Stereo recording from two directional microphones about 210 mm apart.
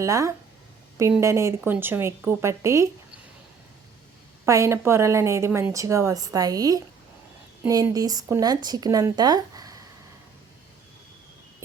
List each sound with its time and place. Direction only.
0.0 s a woman's voice: 15° right (ahead or behind)
4.4 s a woman's voice: 15° right (ahead or behind)